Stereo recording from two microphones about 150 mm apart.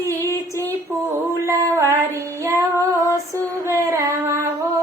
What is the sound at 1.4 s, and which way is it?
Female singing, 20° right (ahead or behind).